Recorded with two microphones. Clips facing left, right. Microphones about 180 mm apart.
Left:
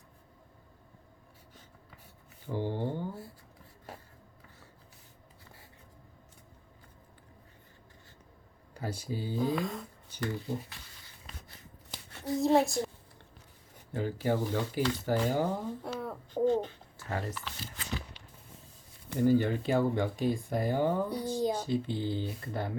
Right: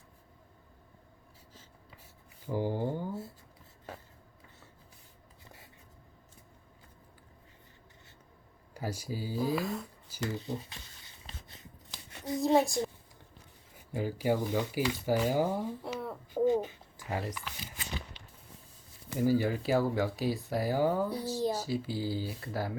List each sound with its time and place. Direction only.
2.5 s speech: 10° right (ahead or behind)
8.7 s speech: 10° right (ahead or behind)
10.2 s a sound: 20° right (ahead or behind)
12.5 s speech: centre (ahead or behind)
13.9 s speech: 10° right (ahead or behind)
16.5 s a sound: 10° right (ahead or behind)
19.0 s speech: 5° right (ahead or behind)